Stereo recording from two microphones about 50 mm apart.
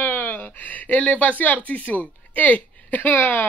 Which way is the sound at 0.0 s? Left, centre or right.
Left.